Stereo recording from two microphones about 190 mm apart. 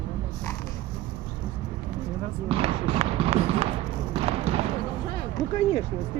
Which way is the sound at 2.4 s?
30° right (ahead or behind).